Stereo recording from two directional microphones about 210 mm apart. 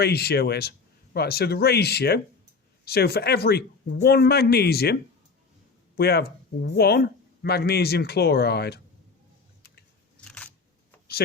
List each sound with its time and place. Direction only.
0.0 s speech: 50° left (ahead or behind)
6.0 s speech: 50° left (ahead or behind)
10.2 s a sound: 5° left (ahead or behind)